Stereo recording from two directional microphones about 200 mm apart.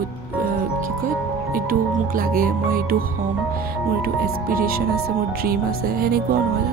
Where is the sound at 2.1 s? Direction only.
45° right (ahead or behind).